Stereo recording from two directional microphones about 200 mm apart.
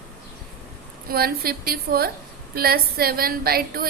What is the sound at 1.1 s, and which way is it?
A woman's voice, 50° right (ahead or behind).